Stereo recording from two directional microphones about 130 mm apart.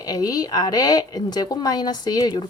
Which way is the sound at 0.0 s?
30° left (ahead or behind).